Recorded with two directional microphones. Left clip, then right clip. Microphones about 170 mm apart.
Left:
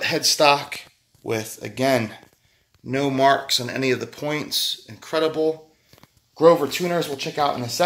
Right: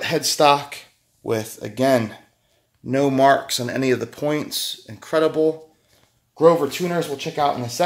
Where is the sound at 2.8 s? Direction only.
45° right (ahead or behind).